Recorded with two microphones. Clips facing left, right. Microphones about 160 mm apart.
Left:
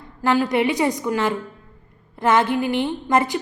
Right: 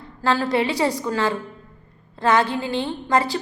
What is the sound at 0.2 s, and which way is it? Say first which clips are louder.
A woman's voice: left 2 dB; 15° left (ahead or behind).